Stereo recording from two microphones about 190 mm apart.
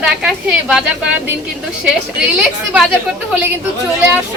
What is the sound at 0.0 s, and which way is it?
Speech, 5° right (ahead or behind).